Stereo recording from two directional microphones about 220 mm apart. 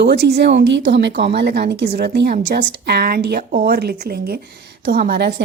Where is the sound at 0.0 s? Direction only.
45° right (ahead or behind).